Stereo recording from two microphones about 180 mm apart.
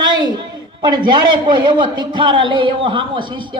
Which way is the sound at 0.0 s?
25° right (ahead or behind).